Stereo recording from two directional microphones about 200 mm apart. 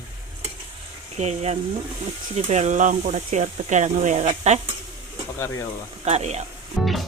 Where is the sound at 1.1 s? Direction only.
35° right (ahead or behind).